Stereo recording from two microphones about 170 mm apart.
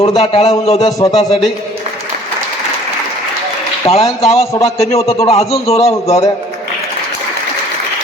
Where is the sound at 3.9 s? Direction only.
40° left (ahead or behind).